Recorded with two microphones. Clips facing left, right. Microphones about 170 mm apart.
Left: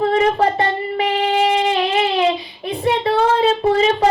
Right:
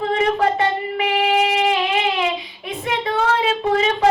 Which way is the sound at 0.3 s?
35° left (ahead or behind).